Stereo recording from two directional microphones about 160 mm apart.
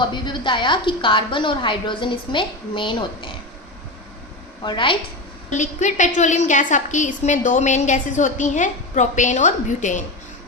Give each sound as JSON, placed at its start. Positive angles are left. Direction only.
{"t": 0.0, "sound": "a woman's voice", "side_deg": 30}
{"t": 4.6, "sound": "a woman's voice", "side_deg": 30}
{"t": 5.5, "sound": "a woman's voice", "side_deg": 50}